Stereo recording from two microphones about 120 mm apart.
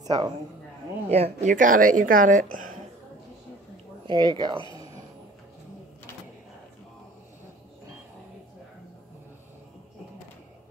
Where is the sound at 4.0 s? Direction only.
40° right (ahead or behind).